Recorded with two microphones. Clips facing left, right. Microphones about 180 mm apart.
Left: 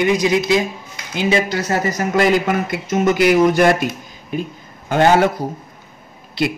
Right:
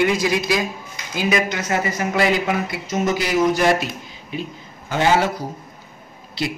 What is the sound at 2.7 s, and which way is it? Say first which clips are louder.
Speech: left 4 dB; 55° left (ahead or behind).